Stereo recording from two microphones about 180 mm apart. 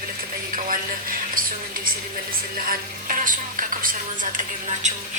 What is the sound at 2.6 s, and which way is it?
A woman's voice, 50° right (ahead or behind).